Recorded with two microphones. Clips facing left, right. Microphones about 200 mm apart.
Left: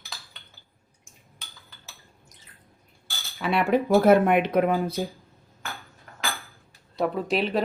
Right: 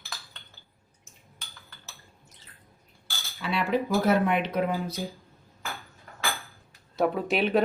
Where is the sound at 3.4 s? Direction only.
55° left (ahead or behind).